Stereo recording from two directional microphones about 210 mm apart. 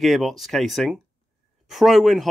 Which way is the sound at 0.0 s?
Centre (ahead or behind).